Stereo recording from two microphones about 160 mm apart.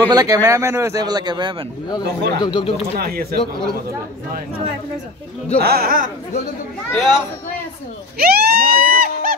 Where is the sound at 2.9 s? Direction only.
75° right (ahead or behind).